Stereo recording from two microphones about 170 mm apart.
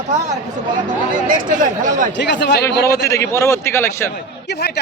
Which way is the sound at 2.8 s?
15° left (ahead or behind).